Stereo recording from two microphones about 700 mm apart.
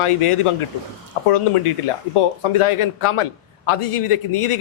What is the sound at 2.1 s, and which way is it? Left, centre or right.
A man's voice, left.